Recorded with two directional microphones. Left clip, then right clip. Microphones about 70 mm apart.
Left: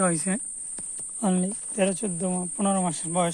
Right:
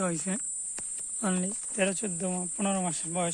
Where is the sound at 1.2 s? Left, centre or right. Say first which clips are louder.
Left 5 dB; left.